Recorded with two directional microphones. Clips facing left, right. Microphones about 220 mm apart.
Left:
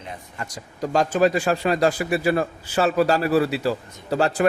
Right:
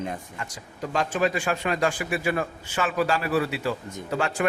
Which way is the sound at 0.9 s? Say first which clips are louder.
Left 6 dB; 40° left (ahead or behind).